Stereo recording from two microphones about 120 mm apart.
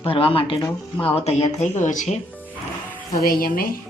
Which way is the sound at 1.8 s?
90° left.